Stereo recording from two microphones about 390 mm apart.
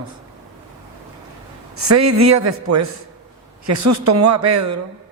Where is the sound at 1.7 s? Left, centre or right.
Right.